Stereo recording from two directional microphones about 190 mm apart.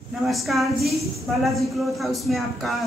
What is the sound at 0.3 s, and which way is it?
Speech, centre (ahead or behind).